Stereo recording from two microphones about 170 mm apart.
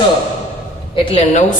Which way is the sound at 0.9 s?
35° left (ahead or behind).